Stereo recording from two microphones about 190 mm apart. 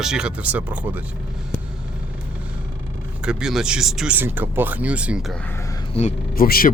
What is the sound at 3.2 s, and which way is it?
Speech, 5° right (ahead or behind).